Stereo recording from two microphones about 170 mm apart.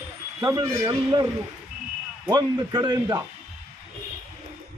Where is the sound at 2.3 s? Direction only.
25° right (ahead or behind).